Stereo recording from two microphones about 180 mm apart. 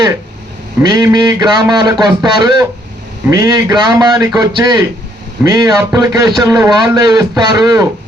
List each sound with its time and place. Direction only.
0.8 s a man's voice: 20° right (ahead or behind)